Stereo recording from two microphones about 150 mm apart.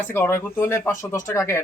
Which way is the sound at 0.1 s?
15° left (ahead or behind).